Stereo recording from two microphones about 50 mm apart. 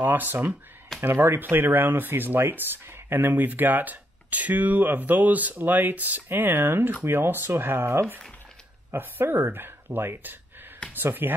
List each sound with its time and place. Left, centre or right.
0.0 s speech: right
1.0 s speech: right
8.9 s speech: right